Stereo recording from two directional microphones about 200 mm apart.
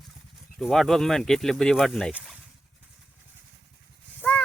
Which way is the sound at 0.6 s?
Centre (ahead or behind).